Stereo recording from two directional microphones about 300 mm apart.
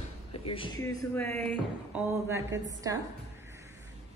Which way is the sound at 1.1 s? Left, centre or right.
Centre.